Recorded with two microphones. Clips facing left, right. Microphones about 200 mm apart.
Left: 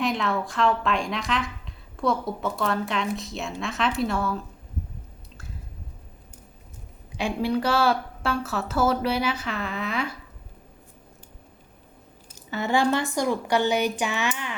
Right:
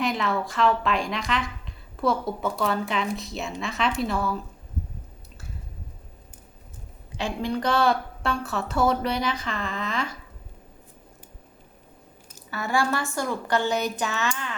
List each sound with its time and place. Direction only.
0.0 s a woman's voice: centre (ahead or behind)
7.2 s speech: 10° left (ahead or behind)
12.5 s speech: 20° left (ahead or behind)